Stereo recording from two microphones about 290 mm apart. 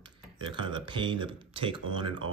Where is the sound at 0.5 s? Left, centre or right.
Centre.